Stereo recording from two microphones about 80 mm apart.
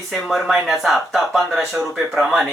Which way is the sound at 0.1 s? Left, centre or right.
Centre.